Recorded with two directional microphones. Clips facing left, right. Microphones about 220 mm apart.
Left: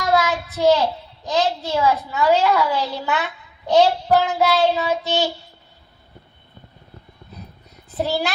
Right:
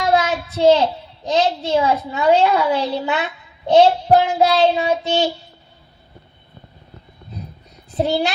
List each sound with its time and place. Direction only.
0.0 s a child's voice: 25° right (ahead or behind)